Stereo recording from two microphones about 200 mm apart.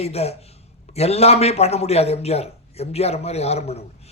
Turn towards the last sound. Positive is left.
turn(degrees=30)  # may be behind; listen again after turning